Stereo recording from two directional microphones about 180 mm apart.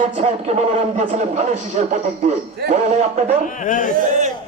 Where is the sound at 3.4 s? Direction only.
45° left (ahead or behind).